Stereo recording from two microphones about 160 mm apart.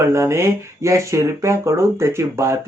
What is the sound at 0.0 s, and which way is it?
Speech, 15° right (ahead or behind).